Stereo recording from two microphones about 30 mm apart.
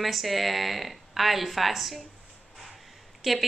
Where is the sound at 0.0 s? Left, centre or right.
Centre.